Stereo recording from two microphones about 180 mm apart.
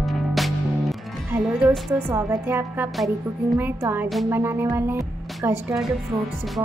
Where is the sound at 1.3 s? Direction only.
15° right (ahead or behind).